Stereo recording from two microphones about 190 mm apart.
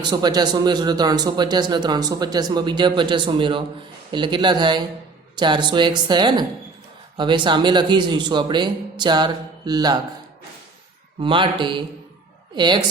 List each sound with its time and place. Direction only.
0.0 s speech: 20° right (ahead or behind)
11.2 s speech: 25° right (ahead or behind)